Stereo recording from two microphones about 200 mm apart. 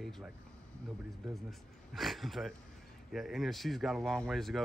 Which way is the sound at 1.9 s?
Centre (ahead or behind).